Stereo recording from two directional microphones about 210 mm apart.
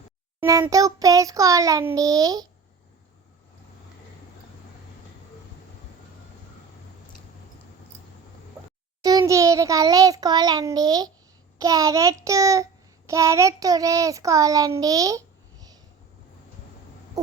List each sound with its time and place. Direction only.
0.3 s child singing: 10° right (ahead or behind)
9.0 s child singing: 15° right (ahead or behind)